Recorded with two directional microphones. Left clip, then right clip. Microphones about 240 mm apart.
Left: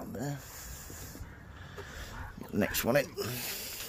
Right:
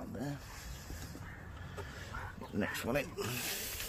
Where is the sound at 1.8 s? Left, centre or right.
Left.